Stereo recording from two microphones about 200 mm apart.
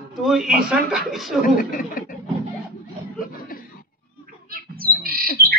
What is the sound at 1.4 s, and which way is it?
Speech, 45° left (ahead or behind).